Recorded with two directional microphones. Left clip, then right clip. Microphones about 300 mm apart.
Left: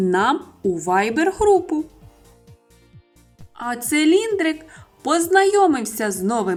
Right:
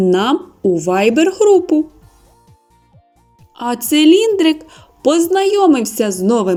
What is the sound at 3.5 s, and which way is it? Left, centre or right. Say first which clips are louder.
A woman's voice: right 6 dB; centre.